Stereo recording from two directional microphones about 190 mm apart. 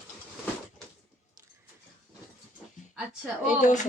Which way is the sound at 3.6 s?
40° left (ahead or behind).